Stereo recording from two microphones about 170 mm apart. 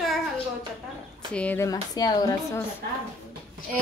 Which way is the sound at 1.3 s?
10° left (ahead or behind).